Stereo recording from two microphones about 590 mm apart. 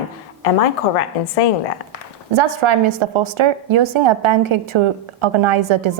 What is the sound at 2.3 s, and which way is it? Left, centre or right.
A woman's voice, right.